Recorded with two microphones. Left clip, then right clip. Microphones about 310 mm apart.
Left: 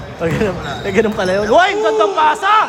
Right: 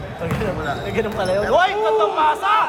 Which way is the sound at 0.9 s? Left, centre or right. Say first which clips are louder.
Left 8 dB; left.